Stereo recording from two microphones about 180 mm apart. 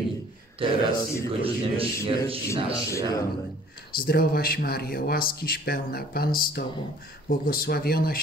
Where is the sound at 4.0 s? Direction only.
55° left (ahead or behind).